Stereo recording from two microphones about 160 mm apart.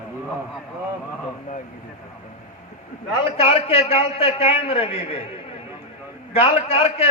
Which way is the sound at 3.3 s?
35° left (ahead or behind).